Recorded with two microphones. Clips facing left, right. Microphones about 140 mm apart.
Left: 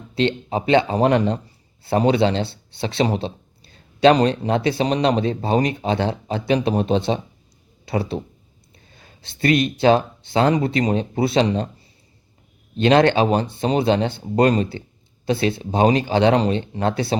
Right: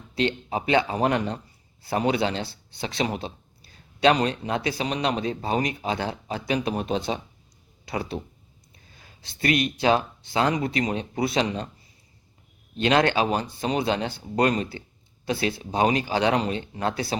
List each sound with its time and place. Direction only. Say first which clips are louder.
0.1 s speech: left 5 dB; 25° left (ahead or behind)
12.8 s speech: left 6 dB; 30° left (ahead or behind)